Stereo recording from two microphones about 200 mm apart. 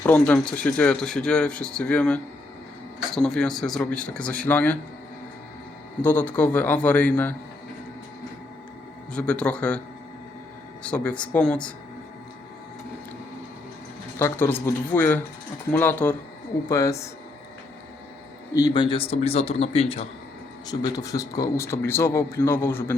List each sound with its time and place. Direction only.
0.0 s speech: 5° left (ahead or behind)
6.0 s speech: 10° left (ahead or behind)
9.1 s speech: 5° left (ahead or behind)
10.8 s speech: 5° left (ahead or behind)
14.2 s speech: 10° left (ahead or behind)
18.5 s a man's voice: 20° left (ahead or behind)
20.7 s speech: 20° left (ahead or behind)